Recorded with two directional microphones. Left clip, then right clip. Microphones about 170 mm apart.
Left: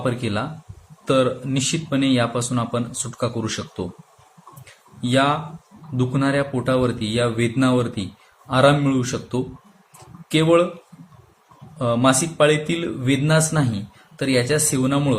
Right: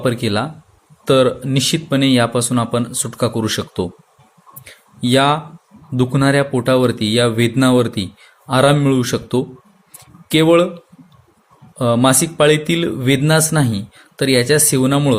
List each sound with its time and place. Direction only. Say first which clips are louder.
0.0 s speech: right 6 dB; 50° right (ahead or behind)
4.6 s a sound: right 7 dB; 50° right (ahead or behind)
6.0 s speech: right 6 dB; 50° right (ahead or behind)
11.8 s speech: right 4 dB; 50° right (ahead or behind)